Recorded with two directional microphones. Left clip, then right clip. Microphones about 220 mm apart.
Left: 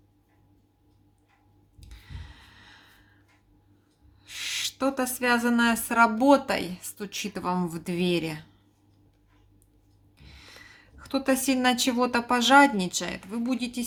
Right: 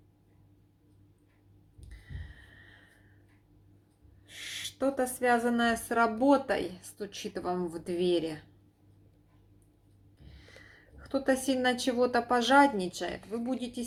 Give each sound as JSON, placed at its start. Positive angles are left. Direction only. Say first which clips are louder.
{"t": 4.3, "sound": "speech", "louder": "left 9 dB", "side_deg": 45}
{"t": 11.1, "sound": "speech", "louder": "left 3 dB", "side_deg": 45}